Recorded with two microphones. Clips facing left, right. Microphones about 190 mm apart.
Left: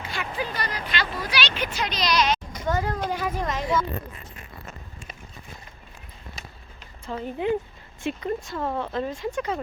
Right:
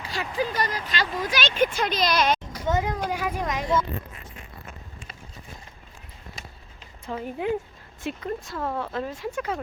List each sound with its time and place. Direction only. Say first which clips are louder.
0.0 s speech: right 3 dB; 35° right (ahead or behind); by 2.4 s 50° right (ahead or behind)
2.6 s speech: right 1 dB; 15° right (ahead or behind)
7.0 s speech: left 1 dB; 10° right (ahead or behind)